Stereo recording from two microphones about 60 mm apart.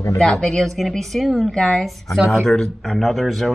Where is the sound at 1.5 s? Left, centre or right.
Centre.